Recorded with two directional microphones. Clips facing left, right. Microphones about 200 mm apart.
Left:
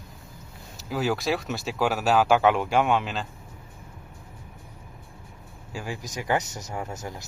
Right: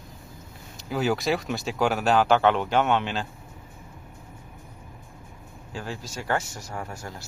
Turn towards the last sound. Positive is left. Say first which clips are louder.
# left 2 dB
turn(degrees=20)  # may be behind; listen again after turning